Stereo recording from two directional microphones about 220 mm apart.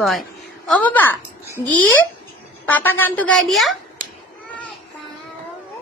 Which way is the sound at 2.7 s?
10° left (ahead or behind).